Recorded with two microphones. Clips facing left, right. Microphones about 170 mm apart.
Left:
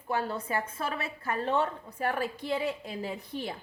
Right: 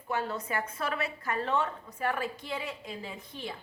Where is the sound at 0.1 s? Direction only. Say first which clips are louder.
Left 2 dB; 35° left (ahead or behind).